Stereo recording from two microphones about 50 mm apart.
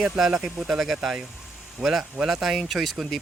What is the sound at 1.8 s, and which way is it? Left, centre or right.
Speech, centre.